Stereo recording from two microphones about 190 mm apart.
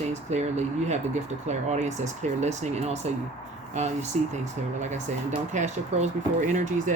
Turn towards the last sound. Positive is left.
turn(degrees=-40)  # may be behind; listen again after turning